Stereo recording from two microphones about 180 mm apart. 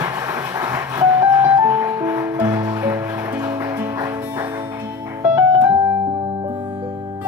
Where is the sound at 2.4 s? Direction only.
20° right (ahead or behind).